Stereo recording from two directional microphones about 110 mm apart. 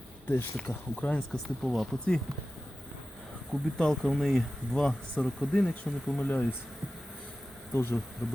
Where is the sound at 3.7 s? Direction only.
5° left (ahead or behind).